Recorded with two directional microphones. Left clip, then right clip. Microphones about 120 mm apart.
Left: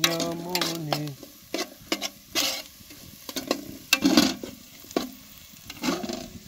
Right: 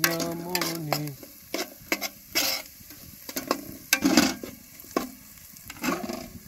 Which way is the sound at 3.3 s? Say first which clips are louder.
Even; 20° left (ahead or behind).